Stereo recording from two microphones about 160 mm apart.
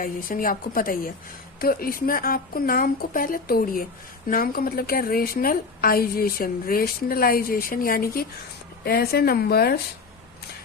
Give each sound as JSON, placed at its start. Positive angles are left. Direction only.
{"t": 0.0, "sound": "a woman's voice", "side_deg": 60}